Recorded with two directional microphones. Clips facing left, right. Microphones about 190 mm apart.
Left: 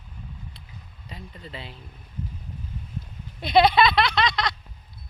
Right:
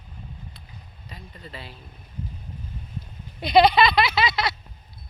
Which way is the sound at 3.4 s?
Centre (ahead or behind).